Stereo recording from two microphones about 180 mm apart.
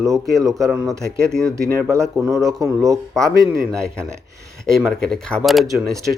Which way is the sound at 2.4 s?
20° right (ahead or behind).